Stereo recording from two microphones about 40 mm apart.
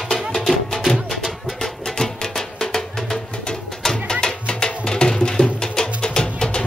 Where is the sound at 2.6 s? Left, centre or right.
Centre.